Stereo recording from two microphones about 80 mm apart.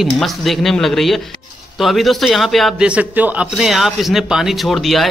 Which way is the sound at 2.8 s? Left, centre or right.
Centre.